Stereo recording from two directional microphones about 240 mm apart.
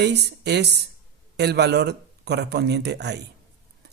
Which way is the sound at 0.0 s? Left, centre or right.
Right.